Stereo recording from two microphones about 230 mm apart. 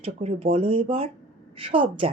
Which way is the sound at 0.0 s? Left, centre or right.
Right.